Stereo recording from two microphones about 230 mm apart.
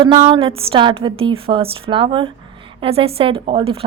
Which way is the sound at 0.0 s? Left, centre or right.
Right.